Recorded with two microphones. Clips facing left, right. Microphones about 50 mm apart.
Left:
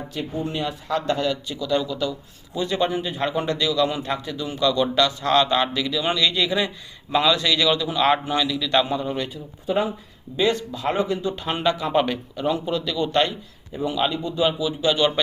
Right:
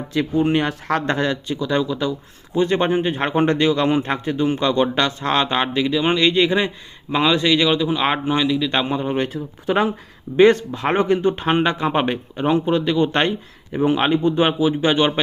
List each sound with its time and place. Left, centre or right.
0.1 s a man's voice: right
7.1 s speech: right
9.3 s speech: right
10.3 s a man's voice: right